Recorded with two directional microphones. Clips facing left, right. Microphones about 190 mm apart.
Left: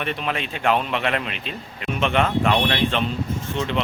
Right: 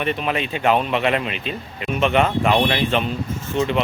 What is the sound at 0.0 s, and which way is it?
Speech, 5° right (ahead or behind).